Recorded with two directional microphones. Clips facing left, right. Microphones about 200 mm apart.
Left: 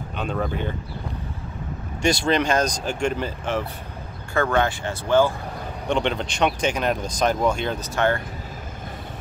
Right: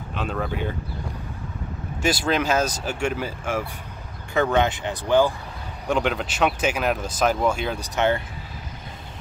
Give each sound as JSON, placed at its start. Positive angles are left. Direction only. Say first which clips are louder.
{"t": 0.1, "sound": "speech", "louder": "left 1 dB", "side_deg": 0}
{"t": 2.0, "sound": "speech", "louder": "left 2 dB", "side_deg": -5}